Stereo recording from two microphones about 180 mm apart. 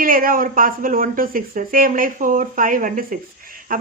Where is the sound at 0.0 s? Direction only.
50° right (ahead or behind).